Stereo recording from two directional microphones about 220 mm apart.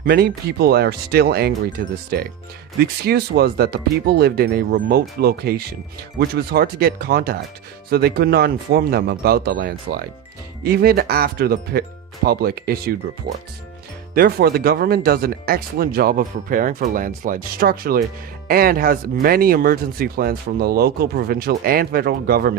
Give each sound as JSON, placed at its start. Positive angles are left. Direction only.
{"t": 0.0, "sound": "speech", "side_deg": -45}
{"t": 14.2, "sound": "speech", "side_deg": -45}